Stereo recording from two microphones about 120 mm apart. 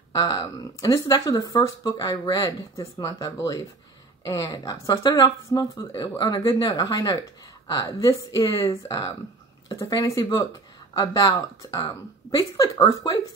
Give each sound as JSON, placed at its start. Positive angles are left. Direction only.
{"t": 0.1, "sound": "speech", "side_deg": 30}